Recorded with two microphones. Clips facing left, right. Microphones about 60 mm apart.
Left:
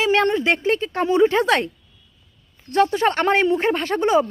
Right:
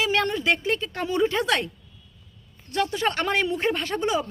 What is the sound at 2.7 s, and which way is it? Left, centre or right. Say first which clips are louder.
Speech: left 7 dB; left.